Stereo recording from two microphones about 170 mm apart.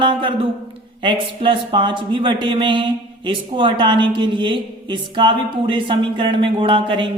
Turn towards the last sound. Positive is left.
turn(degrees=-30)  # may be behind; listen again after turning